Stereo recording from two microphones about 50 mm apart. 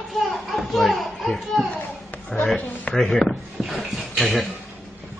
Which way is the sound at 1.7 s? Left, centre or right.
Left.